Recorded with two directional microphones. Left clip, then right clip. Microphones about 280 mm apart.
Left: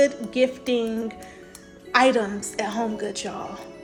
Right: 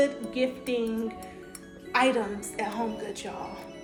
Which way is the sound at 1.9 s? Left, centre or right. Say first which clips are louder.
Left 6 dB; left.